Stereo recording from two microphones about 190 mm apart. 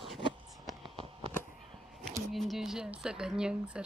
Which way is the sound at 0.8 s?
30° right (ahead or behind).